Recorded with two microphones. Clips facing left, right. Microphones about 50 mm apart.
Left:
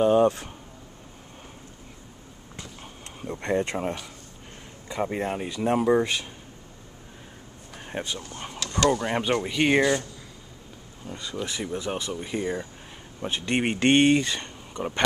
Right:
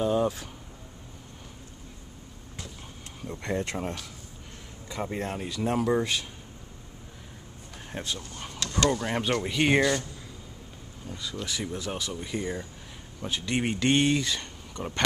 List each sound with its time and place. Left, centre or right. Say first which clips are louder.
0.0 s speech: left 6 dB; left
3.3 s speech: left 5 dB; left
7.9 s speech: left 3 dB; centre
11.0 s a sound: left 3 dB; left
11.7 s speech: left 4 dB; left
13.2 s speech: left 3 dB; left